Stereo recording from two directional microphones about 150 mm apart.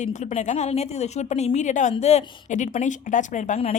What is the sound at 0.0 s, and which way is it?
A woman's voice, 50° left (ahead or behind).